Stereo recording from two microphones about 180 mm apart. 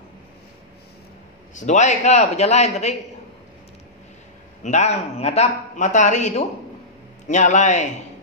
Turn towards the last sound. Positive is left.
turn(degrees=40)  # may be behind; listen again after turning